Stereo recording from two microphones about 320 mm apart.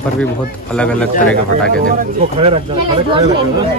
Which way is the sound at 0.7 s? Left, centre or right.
Centre.